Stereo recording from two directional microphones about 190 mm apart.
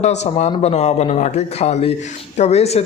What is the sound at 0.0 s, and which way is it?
A man's voice, 35° left (ahead or behind).